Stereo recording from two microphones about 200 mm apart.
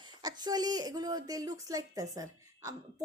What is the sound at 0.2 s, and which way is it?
A woman's voice, 20° right (ahead or behind).